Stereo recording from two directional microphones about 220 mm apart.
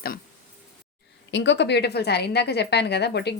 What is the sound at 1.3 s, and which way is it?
A woman's voice, 55° left (ahead or behind).